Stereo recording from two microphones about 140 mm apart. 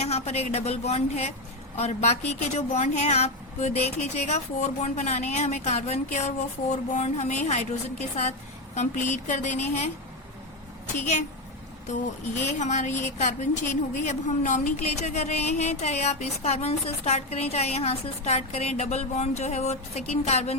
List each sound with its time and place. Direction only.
0.0 s a woman's voice: 50° left (ahead or behind)
8.7 s speech: 55° left (ahead or behind)
11.0 s speech: 55° left (ahead or behind)
12.5 s a woman's voice: 60° left (ahead or behind)